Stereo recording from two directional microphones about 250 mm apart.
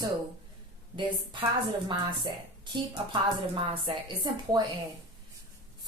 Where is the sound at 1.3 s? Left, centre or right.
Centre.